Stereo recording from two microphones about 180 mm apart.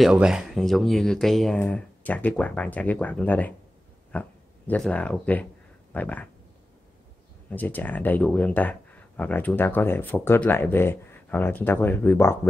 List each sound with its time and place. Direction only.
0.0 s speech: 5° right (ahead or behind)
7.4 s speech: 10° left (ahead or behind)